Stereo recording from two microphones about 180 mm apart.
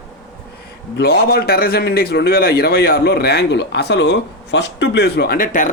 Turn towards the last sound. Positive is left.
turn(degrees=50)  # may be behind; listen again after turning